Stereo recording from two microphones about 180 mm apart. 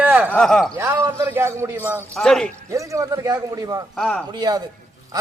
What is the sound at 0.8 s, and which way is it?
A man's voice, 15° right (ahead or behind).